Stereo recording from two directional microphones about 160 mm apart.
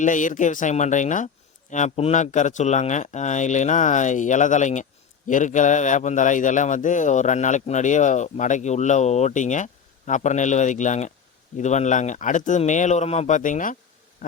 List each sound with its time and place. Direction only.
0.0 s a man's voice: 50° left (ahead or behind)